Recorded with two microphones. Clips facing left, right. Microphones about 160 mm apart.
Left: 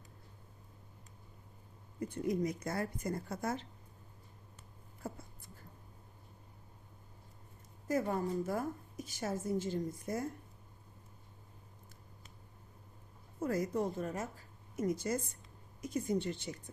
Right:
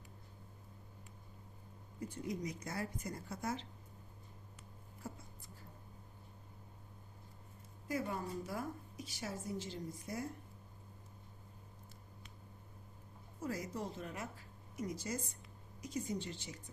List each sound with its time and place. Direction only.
2.0 s speech: 60° left (ahead or behind)
7.9 s a woman's voice: 45° left (ahead or behind)
13.4 s a woman's voice: 55° left (ahead or behind)